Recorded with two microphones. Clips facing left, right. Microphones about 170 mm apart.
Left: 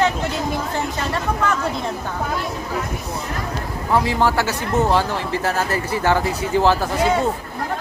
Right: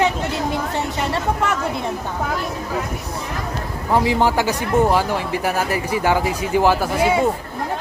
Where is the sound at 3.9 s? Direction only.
15° right (ahead or behind).